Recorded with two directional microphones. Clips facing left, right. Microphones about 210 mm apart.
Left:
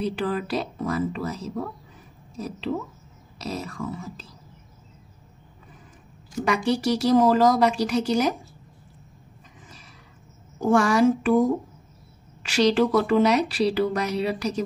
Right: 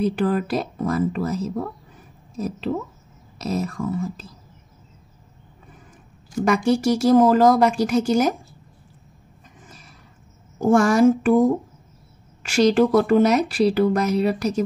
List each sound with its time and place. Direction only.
0.0 s speech: 50° right (ahead or behind)
6.4 s speech: 45° right (ahead or behind)
10.6 s speech: 45° right (ahead or behind)
12.4 s speech: 45° right (ahead or behind)